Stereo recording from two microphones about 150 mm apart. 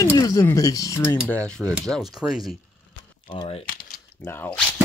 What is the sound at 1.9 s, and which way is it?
Speech, 5° right (ahead or behind).